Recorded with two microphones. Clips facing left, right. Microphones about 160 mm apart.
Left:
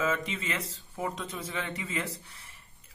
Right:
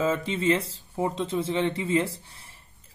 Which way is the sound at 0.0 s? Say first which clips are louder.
Right 6 dB; 30° right (ahead or behind).